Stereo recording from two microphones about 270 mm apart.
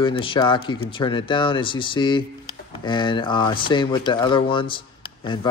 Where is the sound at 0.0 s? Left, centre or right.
Centre.